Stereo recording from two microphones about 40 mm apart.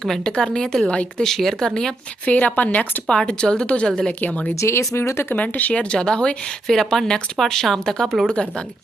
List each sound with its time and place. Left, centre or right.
0.0 s speech: centre
1.5 s speech: centre
2.2 s speech: left
3.2 s a woman's voice: left
4.2 s speech: left
4.7 s speech: left
5.4 s speech: left
5.7 s a woman's voice: left
6.7 s speech: centre
8.3 s a woman's voice: left